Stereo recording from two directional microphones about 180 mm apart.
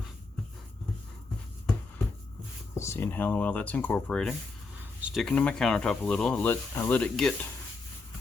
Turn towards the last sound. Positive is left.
turn(degrees=5)  # may be behind; listen again after turning